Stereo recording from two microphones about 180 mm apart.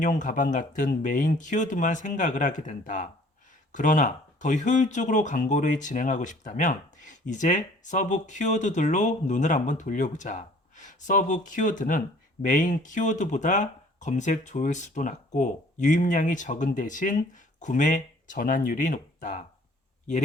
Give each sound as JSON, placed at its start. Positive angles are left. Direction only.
{"t": 0.0, "sound": "speech", "side_deg": 45}